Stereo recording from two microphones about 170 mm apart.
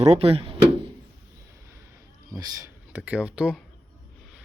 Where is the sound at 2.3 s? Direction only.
20° right (ahead or behind).